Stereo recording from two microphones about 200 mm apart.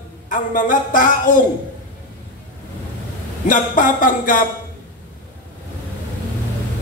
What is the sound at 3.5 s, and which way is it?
Speech, 40° left (ahead or behind).